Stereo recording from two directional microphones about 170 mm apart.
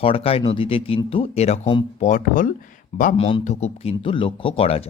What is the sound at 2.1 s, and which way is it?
Speech, 50° left (ahead or behind).